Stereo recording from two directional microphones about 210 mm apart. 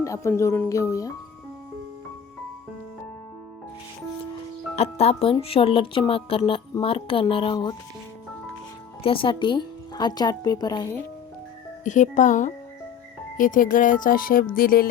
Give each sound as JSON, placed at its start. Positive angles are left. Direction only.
{"t": 0.0, "sound": "speech", "side_deg": 15}
{"t": 4.7, "sound": "speech", "side_deg": 30}
{"t": 9.0, "sound": "speech", "side_deg": 25}
{"t": 11.9, "sound": "speech", "side_deg": 35}
{"t": 14.5, "sound": "music", "side_deg": 45}